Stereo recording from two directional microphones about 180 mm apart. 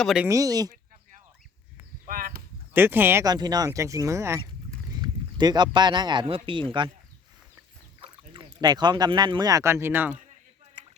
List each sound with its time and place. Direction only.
0.0 s speech: centre (ahead or behind)
0.3 s speech: 20° right (ahead or behind)
2.0 s a sound: 55° right (ahead or behind)
2.7 s speech: 10° right (ahead or behind)
4.9 s a sound: 25° right (ahead or behind)
5.7 s speech: 25° right (ahead or behind)
8.0 s speech: 25° right (ahead or behind); by 10.2 s 10° right (ahead or behind)